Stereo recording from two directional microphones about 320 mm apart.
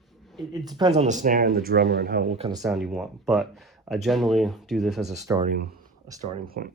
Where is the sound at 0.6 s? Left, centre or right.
Centre.